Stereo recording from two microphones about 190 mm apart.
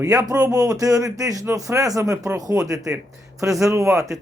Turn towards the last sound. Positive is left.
turn(degrees=-15)  # may be behind; listen again after turning